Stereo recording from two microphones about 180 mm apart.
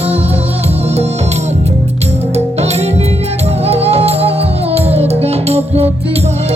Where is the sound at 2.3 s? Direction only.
35° right (ahead or behind).